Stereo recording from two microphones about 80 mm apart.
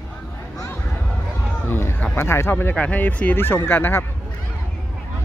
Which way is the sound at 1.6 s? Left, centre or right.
Left.